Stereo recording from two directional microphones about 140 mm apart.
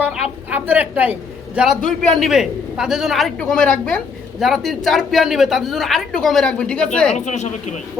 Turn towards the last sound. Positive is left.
turn(degrees=55)  # may be behind; listen again after turning